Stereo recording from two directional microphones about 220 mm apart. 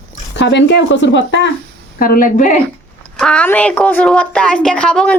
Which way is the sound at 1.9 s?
40° left (ahead or behind).